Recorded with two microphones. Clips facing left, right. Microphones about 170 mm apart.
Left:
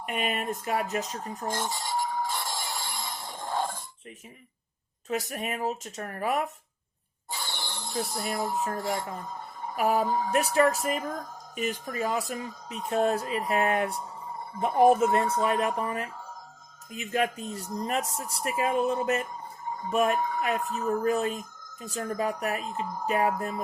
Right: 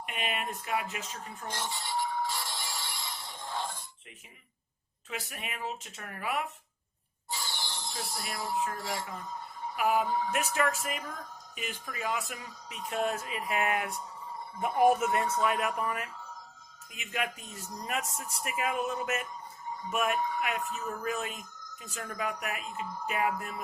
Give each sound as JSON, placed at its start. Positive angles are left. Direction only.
{"t": 0.0, "sound": "a sound", "side_deg": 45}
{"t": 5.0, "sound": "speech", "side_deg": 40}
{"t": 7.3, "sound": "speech", "side_deg": 60}
{"t": 14.8, "sound": "speech", "side_deg": 25}
{"t": 16.9, "sound": "speech", "side_deg": 40}
{"t": 19.3, "sound": "music", "side_deg": 50}
{"t": 19.9, "sound": "speech", "side_deg": 30}
{"t": 20.1, "sound": "speech", "side_deg": 50}